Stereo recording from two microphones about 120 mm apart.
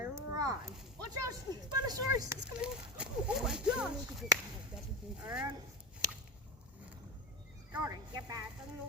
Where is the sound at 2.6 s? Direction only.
10° right (ahead or behind).